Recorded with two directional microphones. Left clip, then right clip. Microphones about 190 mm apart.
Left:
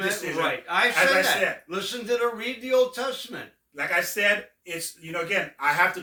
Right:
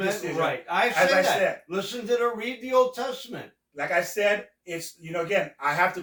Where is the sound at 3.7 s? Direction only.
15° left (ahead or behind).